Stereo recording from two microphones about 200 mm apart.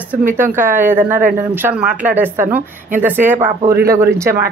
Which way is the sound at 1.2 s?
40° right (ahead or behind).